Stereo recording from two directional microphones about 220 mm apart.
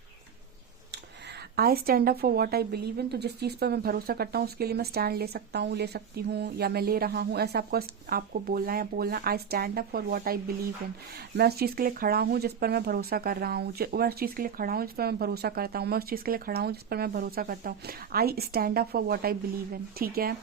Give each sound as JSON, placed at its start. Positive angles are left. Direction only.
{"t": 1.5, "sound": "speech", "side_deg": -45}